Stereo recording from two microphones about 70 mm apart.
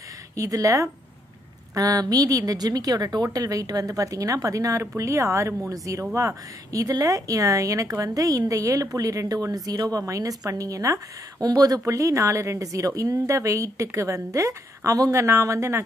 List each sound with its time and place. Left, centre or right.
0.4 s speech: right
9.5 s speech: right
11.8 s speech: right